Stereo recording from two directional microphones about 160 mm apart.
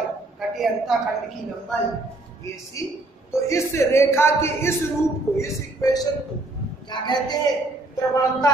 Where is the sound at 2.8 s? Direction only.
20° left (ahead or behind).